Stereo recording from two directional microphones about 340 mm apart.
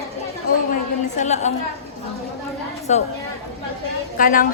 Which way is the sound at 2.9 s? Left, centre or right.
Centre.